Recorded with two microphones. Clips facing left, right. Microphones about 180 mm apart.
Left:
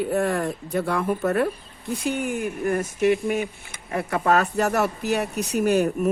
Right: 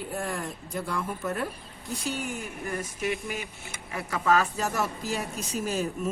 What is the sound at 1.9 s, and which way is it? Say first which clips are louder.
Speech: left 7 dB; 55° left (ahead or behind).